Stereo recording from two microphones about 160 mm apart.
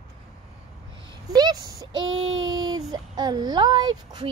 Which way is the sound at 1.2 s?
25° right (ahead or behind).